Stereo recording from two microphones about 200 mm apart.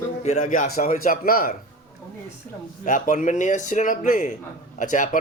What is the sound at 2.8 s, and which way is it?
A man's voice, 40° left (ahead or behind).